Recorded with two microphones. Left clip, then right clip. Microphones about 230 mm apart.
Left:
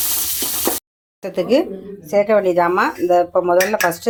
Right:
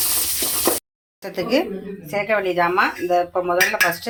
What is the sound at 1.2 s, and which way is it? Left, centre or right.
Speech, left.